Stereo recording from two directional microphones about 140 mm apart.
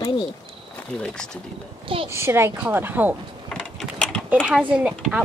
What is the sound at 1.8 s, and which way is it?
Speech, 40° right (ahead or behind).